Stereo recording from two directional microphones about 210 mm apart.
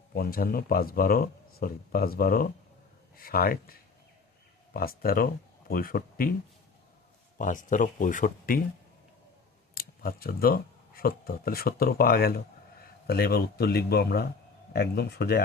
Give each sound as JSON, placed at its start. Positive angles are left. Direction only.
{"t": 0.1, "sound": "speech", "side_deg": 45}
{"t": 7.3, "sound": "speech", "side_deg": 40}
{"t": 9.7, "sound": "speech", "side_deg": 45}